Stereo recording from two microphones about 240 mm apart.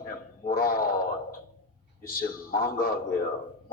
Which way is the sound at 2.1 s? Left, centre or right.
Left.